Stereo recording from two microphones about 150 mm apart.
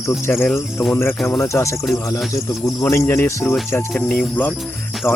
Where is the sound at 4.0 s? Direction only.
5° left (ahead or behind).